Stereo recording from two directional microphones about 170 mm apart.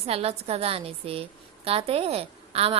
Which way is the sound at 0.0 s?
35° right (ahead or behind).